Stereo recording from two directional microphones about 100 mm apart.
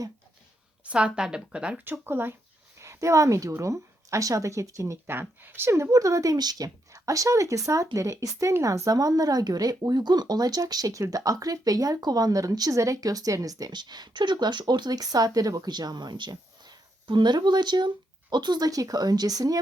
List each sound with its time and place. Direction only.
0.9 s speech: 10° right (ahead or behind)
1.8 s a woman's voice: 20° right (ahead or behind); by 19.5 s 40° right (ahead or behind)